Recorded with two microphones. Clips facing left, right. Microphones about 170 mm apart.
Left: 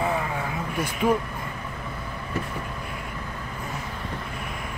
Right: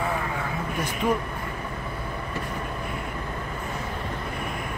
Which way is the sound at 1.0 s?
10° left (ahead or behind).